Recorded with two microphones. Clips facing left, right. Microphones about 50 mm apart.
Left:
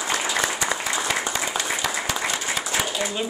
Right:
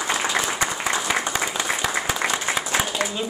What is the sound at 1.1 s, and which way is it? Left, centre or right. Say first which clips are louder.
Applause: right 2 dB; right.